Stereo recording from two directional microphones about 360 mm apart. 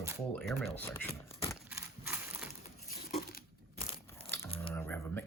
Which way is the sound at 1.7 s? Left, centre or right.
Centre.